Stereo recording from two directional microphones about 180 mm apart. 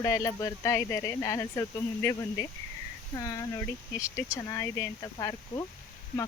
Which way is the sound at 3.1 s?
20° left (ahead or behind).